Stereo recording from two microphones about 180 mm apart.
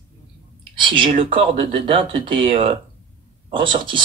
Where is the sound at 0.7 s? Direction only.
25° right (ahead or behind).